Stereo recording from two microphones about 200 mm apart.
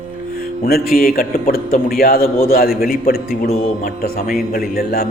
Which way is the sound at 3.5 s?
35° left (ahead or behind).